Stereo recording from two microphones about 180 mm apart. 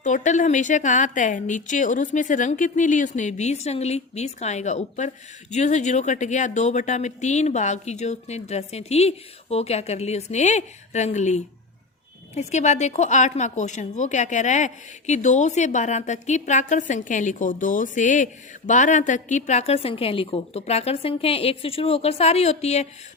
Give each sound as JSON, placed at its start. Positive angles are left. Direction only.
{"t": 0.0, "sound": "speech", "side_deg": 45}